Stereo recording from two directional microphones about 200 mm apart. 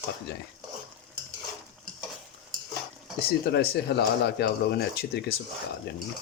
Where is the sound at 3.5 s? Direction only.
55° left (ahead or behind).